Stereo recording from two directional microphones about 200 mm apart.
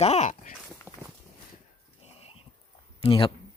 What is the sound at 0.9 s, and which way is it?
Walk, 10° right (ahead or behind).